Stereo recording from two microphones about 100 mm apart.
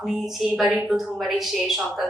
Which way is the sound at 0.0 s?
Centre (ahead or behind).